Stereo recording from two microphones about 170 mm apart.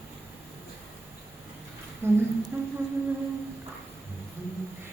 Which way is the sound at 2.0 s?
15° right (ahead or behind).